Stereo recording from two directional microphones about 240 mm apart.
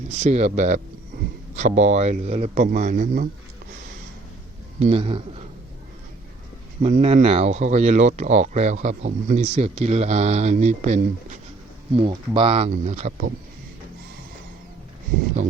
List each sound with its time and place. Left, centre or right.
0.1 s speech: right
4.8 s speech: right
6.8 s speech: right